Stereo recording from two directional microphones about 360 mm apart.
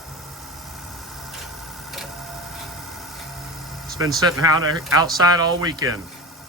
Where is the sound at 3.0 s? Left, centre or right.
Centre.